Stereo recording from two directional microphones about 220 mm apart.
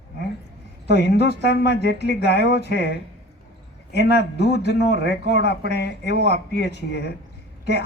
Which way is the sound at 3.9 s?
50° left (ahead or behind).